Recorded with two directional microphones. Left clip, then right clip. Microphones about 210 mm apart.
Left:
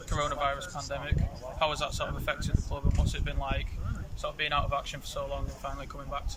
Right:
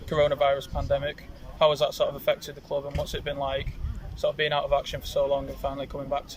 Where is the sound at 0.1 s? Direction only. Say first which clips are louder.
Right 8 dB; 30° right (ahead or behind).